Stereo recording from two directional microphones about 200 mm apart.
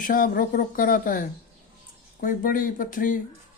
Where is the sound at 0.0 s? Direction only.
45° left (ahead or behind).